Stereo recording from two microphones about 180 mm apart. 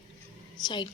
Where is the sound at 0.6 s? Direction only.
25° left (ahead or behind).